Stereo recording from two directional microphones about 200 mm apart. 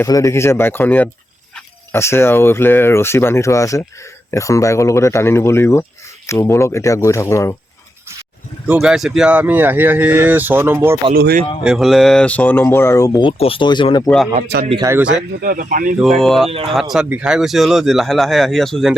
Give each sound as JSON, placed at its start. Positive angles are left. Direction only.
{"t": 0.0, "sound": "speech", "side_deg": 15}
{"t": 8.6, "sound": "speech", "side_deg": -5}
{"t": 11.1, "sound": "speech", "side_deg": -50}
{"t": 11.6, "sound": "speech", "side_deg": 0}
{"t": 14.4, "sound": "speech", "side_deg": -55}
{"t": 14.7, "sound": "speech", "side_deg": -20}
{"t": 15.1, "sound": "speech", "side_deg": -50}
{"t": 16.2, "sound": "speech", "side_deg": 0}